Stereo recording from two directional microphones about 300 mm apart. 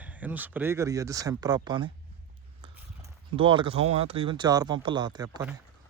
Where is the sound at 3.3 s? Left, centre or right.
Centre.